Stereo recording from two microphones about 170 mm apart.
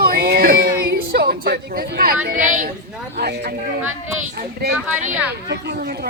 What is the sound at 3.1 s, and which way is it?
Speech, 75° right (ahead or behind).